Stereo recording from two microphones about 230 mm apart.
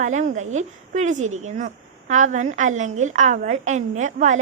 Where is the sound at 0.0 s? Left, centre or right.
Right.